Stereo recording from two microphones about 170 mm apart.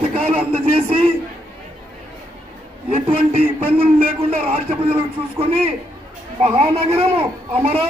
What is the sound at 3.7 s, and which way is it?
A man's voice, 35° right (ahead or behind).